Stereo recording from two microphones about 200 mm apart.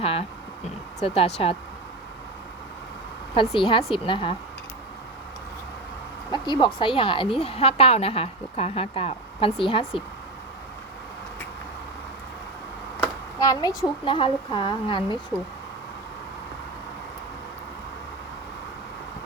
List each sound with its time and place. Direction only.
0.0 s a woman's voice: 30° left (ahead or behind)
3.6 s a woman's voice: 25° left (ahead or behind)
6.3 s a woman's voice: 20° left (ahead or behind)
13.4 s a woman's voice: 20° left (ahead or behind)